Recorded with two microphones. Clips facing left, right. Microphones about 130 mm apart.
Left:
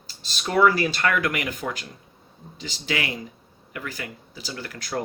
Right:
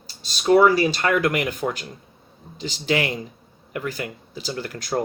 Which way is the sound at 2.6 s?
30° right (ahead or behind).